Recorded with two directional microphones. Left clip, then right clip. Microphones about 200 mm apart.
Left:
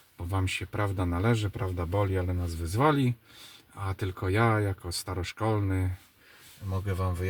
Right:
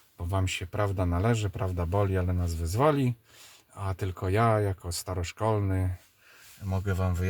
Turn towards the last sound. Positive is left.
turn(degrees=-30)  # may be behind; listen again after turning